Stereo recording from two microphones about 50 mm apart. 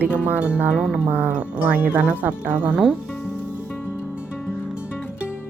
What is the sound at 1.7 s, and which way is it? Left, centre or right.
Speech, right.